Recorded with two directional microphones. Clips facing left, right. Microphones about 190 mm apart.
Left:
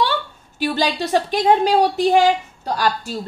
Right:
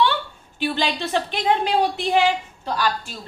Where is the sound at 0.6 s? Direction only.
40° left (ahead or behind).